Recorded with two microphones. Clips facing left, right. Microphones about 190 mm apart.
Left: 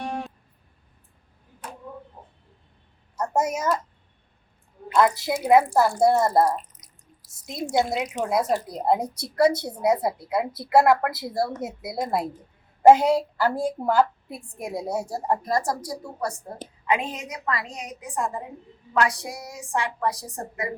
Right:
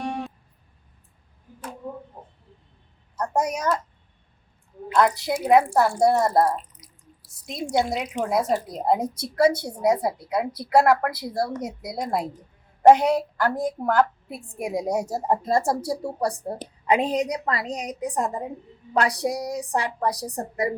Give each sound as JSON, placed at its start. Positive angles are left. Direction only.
{"t": 0.0, "sound": "music", "side_deg": 0}
{"t": 3.2, "sound": "a child's voice", "side_deg": 5}
{"t": 4.9, "sound": "a woman's voice", "side_deg": 0}
{"t": 14.3, "sound": "a woman's voice", "side_deg": -10}